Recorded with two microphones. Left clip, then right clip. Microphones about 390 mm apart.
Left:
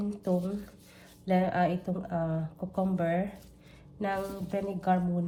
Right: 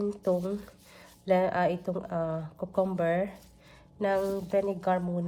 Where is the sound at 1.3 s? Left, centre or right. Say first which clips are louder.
Right 2 dB; centre.